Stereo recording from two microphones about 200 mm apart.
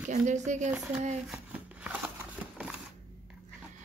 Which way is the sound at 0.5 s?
35° right (ahead or behind).